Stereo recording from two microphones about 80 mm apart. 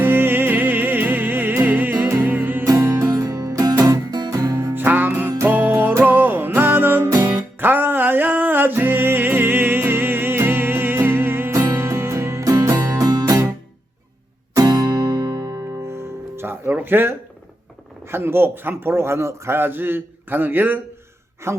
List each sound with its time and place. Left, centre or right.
0.0 s music: right
3.1 s music: right
4.7 s music: right
7.1 s music: right
7.6 s music: right
14.5 s music: right
18.0 s a man's voice: right